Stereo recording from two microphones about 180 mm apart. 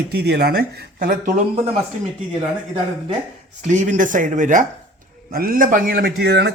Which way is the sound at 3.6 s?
45° right (ahead or behind).